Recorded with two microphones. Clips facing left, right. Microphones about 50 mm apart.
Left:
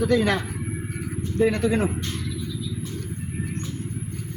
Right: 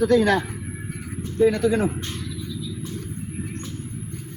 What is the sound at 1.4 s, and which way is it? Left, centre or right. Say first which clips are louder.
Speech: right 3 dB; left.